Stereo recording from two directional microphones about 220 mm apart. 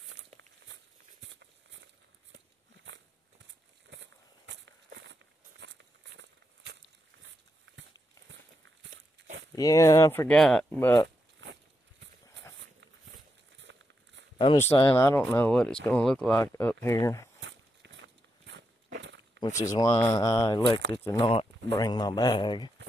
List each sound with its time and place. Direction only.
0.1 s a sound: 60° right (ahead or behind)
1.2 s walk: 55° right (ahead or behind)
2.3 s a sound: 55° right (ahead or behind)
3.9 s walk: 55° right (ahead or behind)
8.3 s walk: 55° right (ahead or behind)
9.6 s speech: 15° left (ahead or behind)
11.4 s a sound: 60° right (ahead or behind)
13.6 s crumpling: 55° right (ahead or behind)
14.4 s speech: 15° left (ahead or behind)
17.4 s walk: 55° right (ahead or behind)
19.4 s speech: 15° left (ahead or behind)